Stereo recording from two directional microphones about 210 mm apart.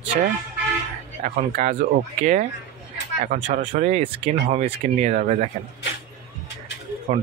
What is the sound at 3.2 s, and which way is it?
Speech, 35° right (ahead or behind).